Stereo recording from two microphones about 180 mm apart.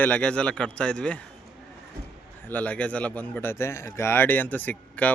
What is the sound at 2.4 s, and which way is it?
A man's voice, 10° left (ahead or behind).